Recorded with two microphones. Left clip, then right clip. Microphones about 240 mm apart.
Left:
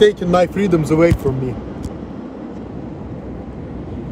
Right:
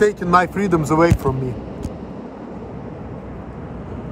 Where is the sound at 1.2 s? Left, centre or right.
Right.